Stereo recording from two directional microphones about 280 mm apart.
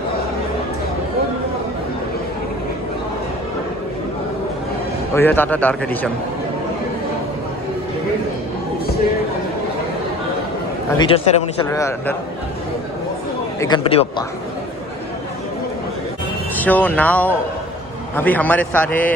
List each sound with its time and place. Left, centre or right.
5.1 s a man's voice: centre
11.0 s a man's voice: centre
13.6 s a man's voice: centre
16.5 s a man's voice: centre